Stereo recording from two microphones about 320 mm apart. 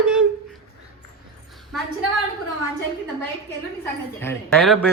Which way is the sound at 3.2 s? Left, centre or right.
Centre.